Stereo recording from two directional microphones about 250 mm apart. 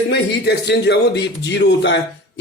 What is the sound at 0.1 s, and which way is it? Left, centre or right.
A man's voice, left.